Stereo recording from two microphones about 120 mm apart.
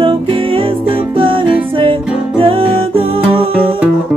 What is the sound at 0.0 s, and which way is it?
Music, 45° right (ahead or behind).